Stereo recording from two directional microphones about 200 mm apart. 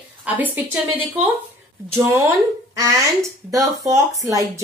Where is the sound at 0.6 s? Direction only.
10° right (ahead or behind).